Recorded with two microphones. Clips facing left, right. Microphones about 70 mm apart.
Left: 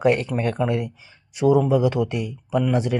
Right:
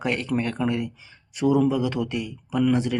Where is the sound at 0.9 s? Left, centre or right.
Left.